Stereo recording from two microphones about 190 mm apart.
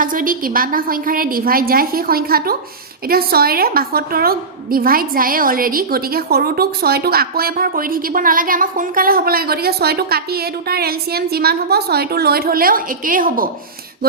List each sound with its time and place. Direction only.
0.0 s a woman's voice: 45° right (ahead or behind)